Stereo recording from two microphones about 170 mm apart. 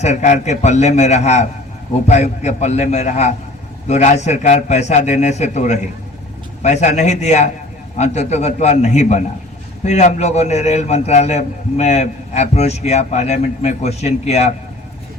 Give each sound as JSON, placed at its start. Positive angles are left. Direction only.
{"t": 0.0, "sound": "a man's voice", "side_deg": 40}